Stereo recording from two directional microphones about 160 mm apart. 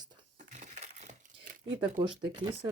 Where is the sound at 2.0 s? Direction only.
30° right (ahead or behind).